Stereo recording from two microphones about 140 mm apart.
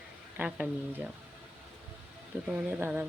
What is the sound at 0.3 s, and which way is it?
Speech, 10° right (ahead or behind).